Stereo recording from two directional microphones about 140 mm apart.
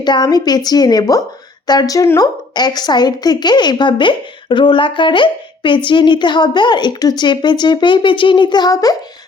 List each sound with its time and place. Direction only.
0.0 s a woman's voice: 30° left (ahead or behind)